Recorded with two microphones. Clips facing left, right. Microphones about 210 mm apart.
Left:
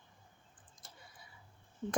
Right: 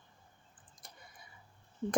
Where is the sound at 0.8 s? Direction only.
15° right (ahead or behind).